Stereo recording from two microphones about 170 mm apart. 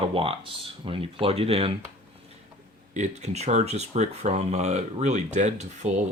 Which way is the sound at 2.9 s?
45° right (ahead or behind).